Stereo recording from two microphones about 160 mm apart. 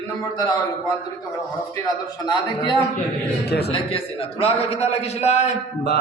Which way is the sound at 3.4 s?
90° left.